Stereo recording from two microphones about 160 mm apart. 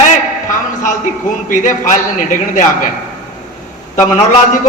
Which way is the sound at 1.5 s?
55° left (ahead or behind).